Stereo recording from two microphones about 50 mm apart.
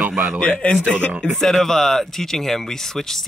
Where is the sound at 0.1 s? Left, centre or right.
Centre.